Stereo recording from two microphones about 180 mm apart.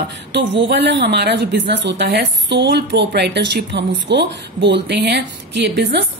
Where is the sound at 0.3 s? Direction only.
80° right.